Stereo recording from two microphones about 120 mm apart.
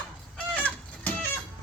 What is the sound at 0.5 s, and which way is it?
Chicken, 10° left (ahead or behind).